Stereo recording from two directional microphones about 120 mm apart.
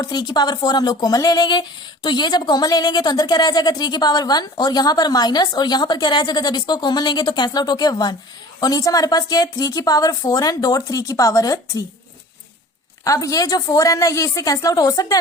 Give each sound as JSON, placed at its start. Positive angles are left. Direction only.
{"t": 0.0, "sound": "speech", "side_deg": 35}
{"t": 13.1, "sound": "a woman's voice", "side_deg": 25}